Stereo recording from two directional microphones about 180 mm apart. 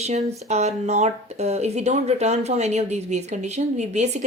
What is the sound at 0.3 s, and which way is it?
Speech, 40° right (ahead or behind).